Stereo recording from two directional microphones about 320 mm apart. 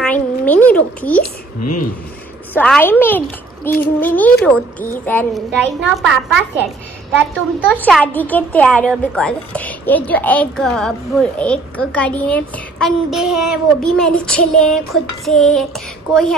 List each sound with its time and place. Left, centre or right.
0.0 s speech: centre
1.6 s speech: left
2.5 s a woman's voice: centre
7.8 s a woman's voice: centre